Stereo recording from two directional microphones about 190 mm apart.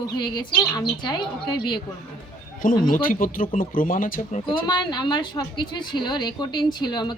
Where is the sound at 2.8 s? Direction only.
45° left (ahead or behind).